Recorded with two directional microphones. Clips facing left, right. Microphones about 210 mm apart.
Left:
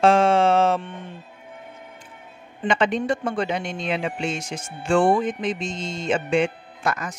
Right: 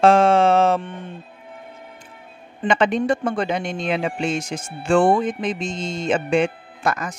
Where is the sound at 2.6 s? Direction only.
50° right (ahead or behind).